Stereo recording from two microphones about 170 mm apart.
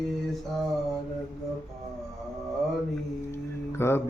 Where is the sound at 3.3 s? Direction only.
15° left (ahead or behind).